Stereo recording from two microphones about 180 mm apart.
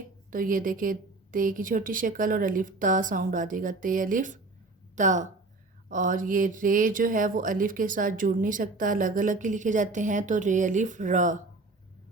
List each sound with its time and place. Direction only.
0.3 s speech: 50° right (ahead or behind)